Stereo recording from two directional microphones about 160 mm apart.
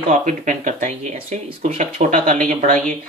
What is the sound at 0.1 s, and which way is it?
Speech, 50° right (ahead or behind).